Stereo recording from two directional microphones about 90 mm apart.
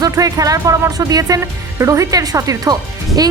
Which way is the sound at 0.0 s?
40° right (ahead or behind).